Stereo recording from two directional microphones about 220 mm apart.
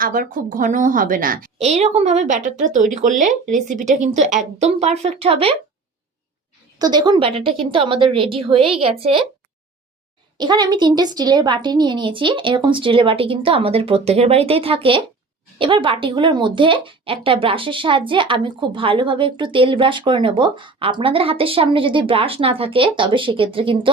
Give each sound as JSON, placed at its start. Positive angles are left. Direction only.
{"t": 0.0, "sound": "a woman's voice", "side_deg": -40}
{"t": 6.7, "sound": "speech", "side_deg": -20}
{"t": 10.3, "sound": "speech", "side_deg": -20}